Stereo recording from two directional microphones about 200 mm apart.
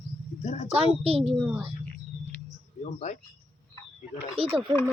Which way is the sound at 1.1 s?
30° right (ahead or behind).